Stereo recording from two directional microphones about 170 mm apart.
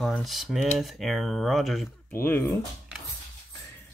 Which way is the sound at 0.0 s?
Centre (ahead or behind).